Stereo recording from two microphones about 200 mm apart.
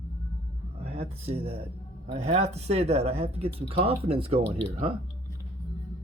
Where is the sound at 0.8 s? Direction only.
30° right (ahead or behind).